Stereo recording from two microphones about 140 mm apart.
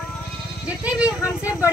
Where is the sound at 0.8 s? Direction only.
10° right (ahead or behind).